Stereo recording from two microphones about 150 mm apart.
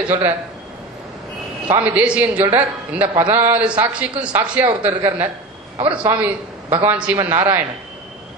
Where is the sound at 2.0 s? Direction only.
10° right (ahead or behind).